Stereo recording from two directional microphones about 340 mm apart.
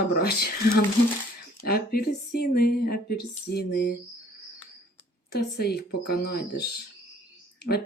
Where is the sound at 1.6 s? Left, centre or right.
Left.